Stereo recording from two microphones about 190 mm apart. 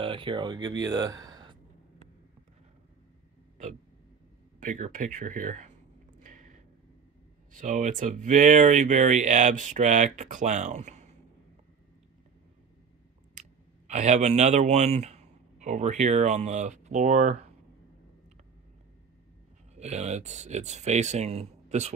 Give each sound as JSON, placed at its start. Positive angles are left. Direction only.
{"t": 0.0, "sound": "speech", "side_deg": -25}
{"t": 4.6, "sound": "speech", "side_deg": -40}
{"t": 7.5, "sound": "speech", "side_deg": -40}
{"t": 13.3, "sound": "speech", "side_deg": -40}
{"t": 19.7, "sound": "speech", "side_deg": -35}